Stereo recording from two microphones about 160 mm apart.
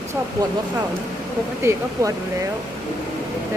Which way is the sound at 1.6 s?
15° right (ahead or behind).